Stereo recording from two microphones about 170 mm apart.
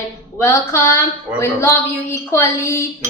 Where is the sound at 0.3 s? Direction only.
15° left (ahead or behind).